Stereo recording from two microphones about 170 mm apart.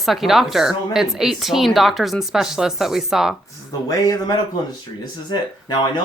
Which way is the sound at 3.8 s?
20° left (ahead or behind).